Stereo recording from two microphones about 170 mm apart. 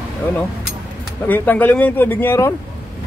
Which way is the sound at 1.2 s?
10° left (ahead or behind).